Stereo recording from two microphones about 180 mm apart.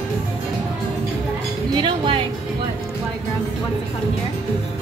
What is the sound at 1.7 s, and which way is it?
Music, 30° right (ahead or behind).